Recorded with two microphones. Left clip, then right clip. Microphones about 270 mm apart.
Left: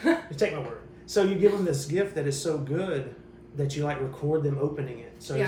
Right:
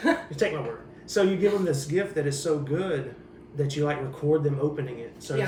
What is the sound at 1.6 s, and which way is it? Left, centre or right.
Speech, centre.